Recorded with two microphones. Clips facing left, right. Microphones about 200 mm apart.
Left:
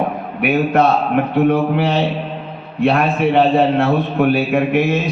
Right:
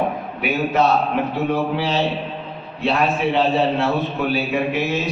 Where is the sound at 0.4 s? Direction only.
55° left (ahead or behind).